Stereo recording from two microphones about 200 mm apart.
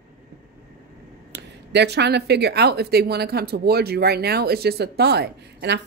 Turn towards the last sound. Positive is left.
turn(degrees=-55)  # may be behind; listen again after turning